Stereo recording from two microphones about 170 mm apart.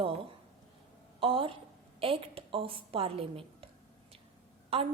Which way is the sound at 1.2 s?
30° right (ahead or behind).